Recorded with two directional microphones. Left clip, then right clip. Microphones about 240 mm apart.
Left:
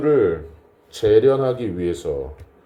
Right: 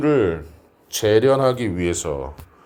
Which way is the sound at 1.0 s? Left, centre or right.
Right.